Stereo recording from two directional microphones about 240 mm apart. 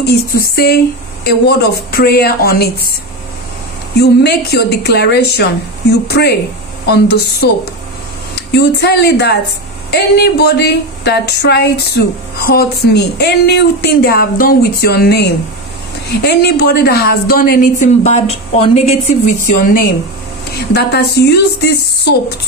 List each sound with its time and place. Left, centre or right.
0.0 s a woman's voice: left
4.0 s a woman's voice: left
20.5 s speech: left